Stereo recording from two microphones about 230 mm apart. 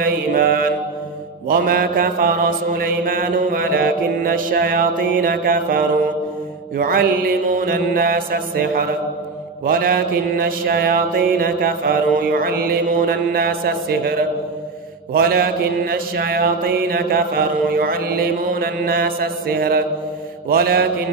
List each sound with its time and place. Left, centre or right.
0.0 s mantra: right